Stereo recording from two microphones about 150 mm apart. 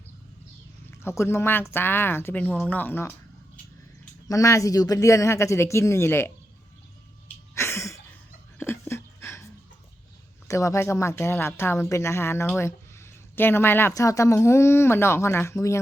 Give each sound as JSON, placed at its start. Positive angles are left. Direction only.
{"t": 0.9, "sound": "a woman's voice", "side_deg": 15}
{"t": 4.3, "sound": "speech", "side_deg": 20}
{"t": 7.5, "sound": "a sound", "side_deg": 20}
{"t": 10.5, "sound": "a woman's voice", "side_deg": 20}